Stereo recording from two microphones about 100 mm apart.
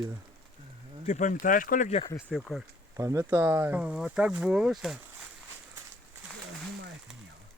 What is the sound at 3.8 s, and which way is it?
Speech, 10° right (ahead or behind).